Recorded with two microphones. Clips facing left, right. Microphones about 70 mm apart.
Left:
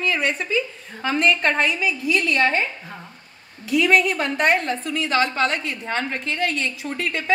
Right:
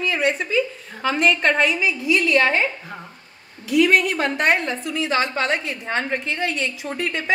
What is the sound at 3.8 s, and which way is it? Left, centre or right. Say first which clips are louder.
A woman's voice: right 2 dB; right.